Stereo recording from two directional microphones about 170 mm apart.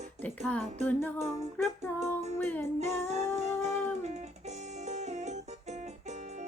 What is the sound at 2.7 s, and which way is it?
Speech, 40° right (ahead or behind).